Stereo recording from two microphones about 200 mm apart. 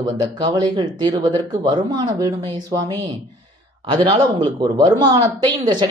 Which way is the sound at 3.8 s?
25° right (ahead or behind).